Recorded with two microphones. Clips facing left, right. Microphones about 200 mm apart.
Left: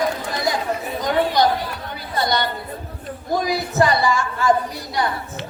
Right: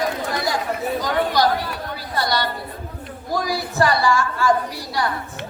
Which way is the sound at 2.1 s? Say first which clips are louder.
Left 1 dB; 20° left (ahead or behind).